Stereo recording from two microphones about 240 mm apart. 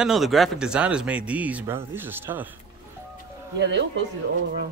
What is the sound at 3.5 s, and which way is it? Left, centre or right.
Speech, right.